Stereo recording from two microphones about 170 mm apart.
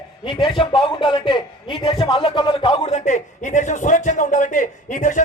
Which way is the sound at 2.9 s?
45° left (ahead or behind).